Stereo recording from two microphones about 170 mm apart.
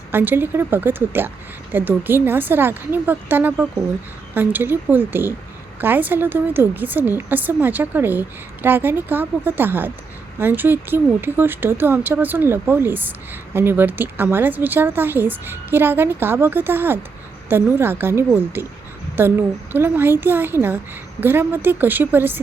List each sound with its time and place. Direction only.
0.1 s speech: 10° right (ahead or behind)